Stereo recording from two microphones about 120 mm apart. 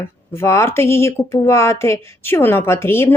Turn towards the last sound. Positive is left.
turn(degrees=20)  # may be behind; listen again after turning